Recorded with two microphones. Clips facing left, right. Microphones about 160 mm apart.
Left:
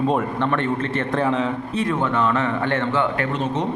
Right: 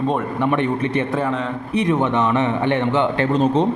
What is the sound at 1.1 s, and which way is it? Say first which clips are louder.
Speech: left 1 dB; centre (ahead or behind).